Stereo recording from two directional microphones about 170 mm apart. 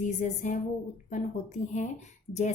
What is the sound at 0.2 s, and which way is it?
A woman's voice, 50° left (ahead or behind).